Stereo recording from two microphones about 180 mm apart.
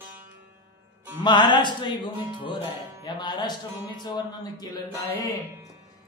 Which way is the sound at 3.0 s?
25° left (ahead or behind).